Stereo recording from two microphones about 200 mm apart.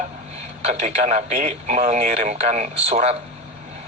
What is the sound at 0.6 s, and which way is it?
Speech, 35° right (ahead or behind).